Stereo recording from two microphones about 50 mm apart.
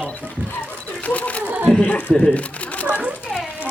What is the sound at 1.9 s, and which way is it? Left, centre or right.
Speech, left.